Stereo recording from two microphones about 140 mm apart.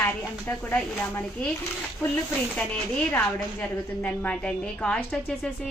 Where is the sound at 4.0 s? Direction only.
10° left (ahead or behind).